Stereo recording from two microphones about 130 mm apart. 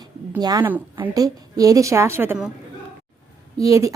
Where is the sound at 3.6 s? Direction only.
25° right (ahead or behind).